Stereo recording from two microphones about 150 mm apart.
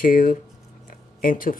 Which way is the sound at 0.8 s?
70° left (ahead or behind).